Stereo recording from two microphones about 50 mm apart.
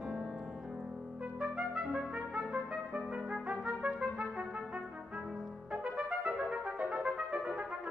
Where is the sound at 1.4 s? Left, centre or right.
Centre.